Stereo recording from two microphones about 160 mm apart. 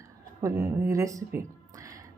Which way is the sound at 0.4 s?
20° right (ahead or behind).